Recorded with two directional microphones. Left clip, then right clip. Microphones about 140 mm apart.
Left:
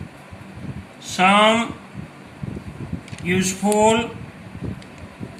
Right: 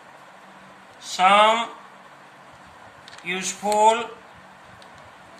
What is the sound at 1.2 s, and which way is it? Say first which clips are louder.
Speech: left 1 dB; 20° left (ahead or behind).